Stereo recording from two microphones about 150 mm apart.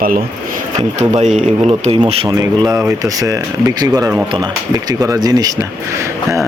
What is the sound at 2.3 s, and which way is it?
Speech, 25° right (ahead or behind).